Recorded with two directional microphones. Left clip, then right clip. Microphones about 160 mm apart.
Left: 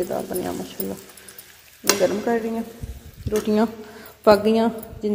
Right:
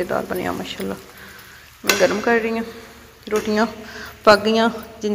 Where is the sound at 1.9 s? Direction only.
5° left (ahead or behind).